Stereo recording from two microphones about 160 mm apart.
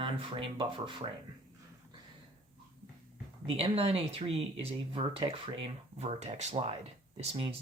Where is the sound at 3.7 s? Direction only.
40° right (ahead or behind).